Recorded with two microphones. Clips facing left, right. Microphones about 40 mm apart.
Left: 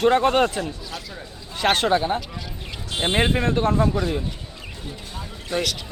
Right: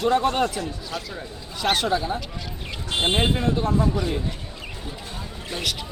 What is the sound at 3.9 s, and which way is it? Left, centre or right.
Speech, centre.